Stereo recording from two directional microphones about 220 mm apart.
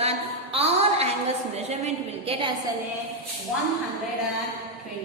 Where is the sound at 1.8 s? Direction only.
25° right (ahead or behind).